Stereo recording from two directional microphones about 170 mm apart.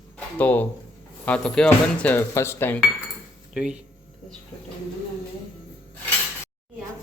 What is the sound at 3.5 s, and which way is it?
Speech, 5° right (ahead or behind).